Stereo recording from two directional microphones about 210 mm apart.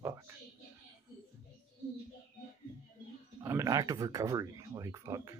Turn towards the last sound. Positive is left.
turn(degrees=-15)  # may be behind; listen again after turning